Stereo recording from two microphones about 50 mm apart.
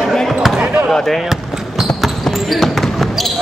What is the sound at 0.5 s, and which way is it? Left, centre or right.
Basketball bounce, right.